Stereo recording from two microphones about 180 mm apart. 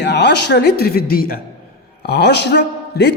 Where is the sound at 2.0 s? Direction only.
65° left (ahead or behind).